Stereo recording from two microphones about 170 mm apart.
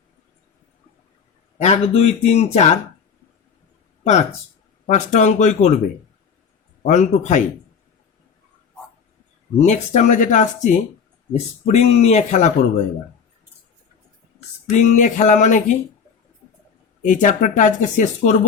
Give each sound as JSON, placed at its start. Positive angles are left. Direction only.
{"t": 1.5, "sound": "speech", "side_deg": 40}
{"t": 4.0, "sound": "speech", "side_deg": 40}
{"t": 6.8, "sound": "speech", "side_deg": 45}
{"t": 9.6, "sound": "speech", "side_deg": 45}
{"t": 14.7, "sound": "speech", "side_deg": 45}
{"t": 17.0, "sound": "speech", "side_deg": 50}